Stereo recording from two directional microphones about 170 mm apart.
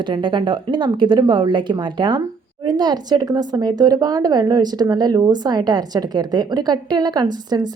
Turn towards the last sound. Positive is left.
turn(degrees=-25)  # may be behind; listen again after turning